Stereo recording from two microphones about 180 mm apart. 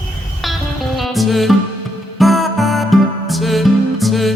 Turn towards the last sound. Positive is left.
turn(degrees=0)  # may be behind; listen again after turning